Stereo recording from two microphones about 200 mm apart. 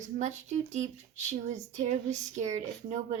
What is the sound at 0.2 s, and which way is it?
A woman's voice, 35° right (ahead or behind).